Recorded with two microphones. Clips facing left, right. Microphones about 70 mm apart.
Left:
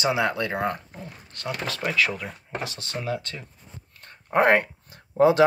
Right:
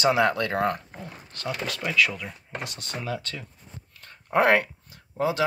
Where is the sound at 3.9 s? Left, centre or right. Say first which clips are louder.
Even; left.